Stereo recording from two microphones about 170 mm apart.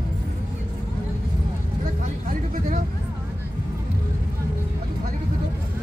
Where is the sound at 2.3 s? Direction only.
50° right (ahead or behind).